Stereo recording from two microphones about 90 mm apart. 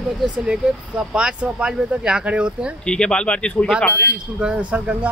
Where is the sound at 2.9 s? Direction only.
10° left (ahead or behind).